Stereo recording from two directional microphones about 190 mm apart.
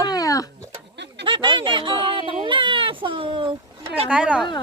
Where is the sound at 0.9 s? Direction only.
65° right (ahead or behind).